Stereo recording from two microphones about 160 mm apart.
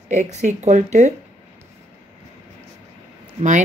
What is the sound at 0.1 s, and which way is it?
Speech, 45° right (ahead or behind).